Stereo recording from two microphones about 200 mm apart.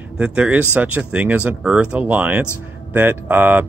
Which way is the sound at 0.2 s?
5° right (ahead or behind).